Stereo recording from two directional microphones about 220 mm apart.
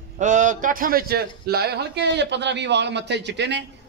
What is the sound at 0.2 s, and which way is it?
A man's voice, 35° right (ahead or behind).